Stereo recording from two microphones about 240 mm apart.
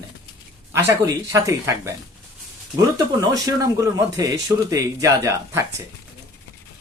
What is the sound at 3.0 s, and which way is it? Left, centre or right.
Speech, centre.